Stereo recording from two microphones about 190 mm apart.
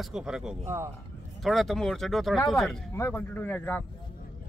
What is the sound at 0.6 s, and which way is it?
Speech, 15° right (ahead or behind).